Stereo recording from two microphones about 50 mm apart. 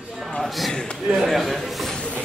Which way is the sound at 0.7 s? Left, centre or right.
Centre.